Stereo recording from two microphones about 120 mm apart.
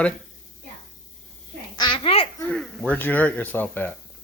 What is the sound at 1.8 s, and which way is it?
Babbling, 45° left (ahead or behind).